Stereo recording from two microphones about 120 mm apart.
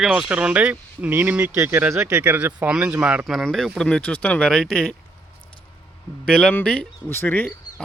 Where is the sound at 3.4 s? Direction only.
Centre (ahead or behind).